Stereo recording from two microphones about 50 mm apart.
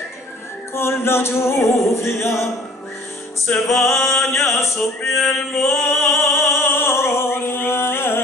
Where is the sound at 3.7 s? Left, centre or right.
Left.